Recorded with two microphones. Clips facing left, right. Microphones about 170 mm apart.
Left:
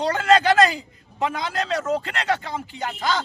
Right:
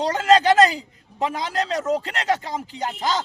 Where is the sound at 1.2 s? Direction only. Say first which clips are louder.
Right 1 dB; 35° right (ahead or behind).